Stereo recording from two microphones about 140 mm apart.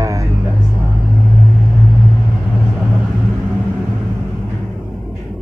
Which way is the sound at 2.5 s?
5° right (ahead or behind).